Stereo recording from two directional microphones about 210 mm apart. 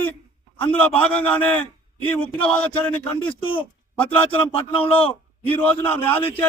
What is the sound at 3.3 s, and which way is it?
Speech, 25° left (ahead or behind).